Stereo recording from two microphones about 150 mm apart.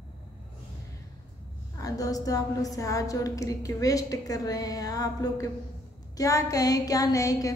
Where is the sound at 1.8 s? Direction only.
25° left (ahead or behind).